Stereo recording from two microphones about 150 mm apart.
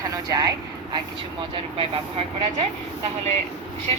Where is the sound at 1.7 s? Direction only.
40° right (ahead or behind).